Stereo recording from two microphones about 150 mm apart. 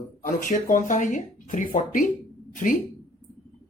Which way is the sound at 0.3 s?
60° left (ahead or behind).